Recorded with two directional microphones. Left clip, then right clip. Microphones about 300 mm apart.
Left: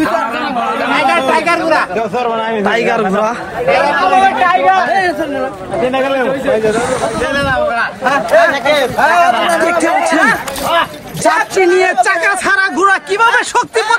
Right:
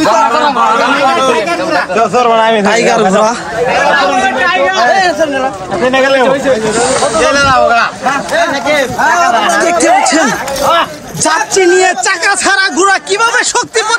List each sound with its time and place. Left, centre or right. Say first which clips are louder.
0.0 s a sound: right 7 dB; centre
2.0 s speech: right 7 dB; right
2.6 s a man's voice: right 4 dB; centre
4.9 s speech: right 4 dB; centre
7.2 s speech: right 7 dB; right
9.4 s a man's voice: right 3 dB; centre